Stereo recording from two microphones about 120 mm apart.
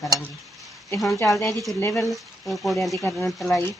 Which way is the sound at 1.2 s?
Centre (ahead or behind).